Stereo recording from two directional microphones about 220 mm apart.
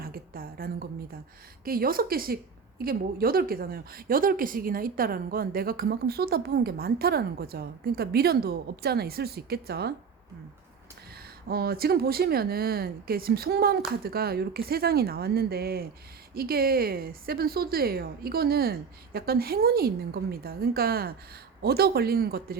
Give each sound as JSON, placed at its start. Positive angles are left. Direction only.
{"t": 0.0, "sound": "a sound", "side_deg": -40}
{"t": 1.6, "sound": "a woman's voice", "side_deg": -40}
{"t": 11.4, "sound": "a woman's voice", "side_deg": -45}